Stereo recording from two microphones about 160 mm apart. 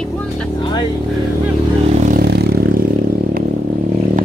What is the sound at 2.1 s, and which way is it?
Vehicle, 90° right.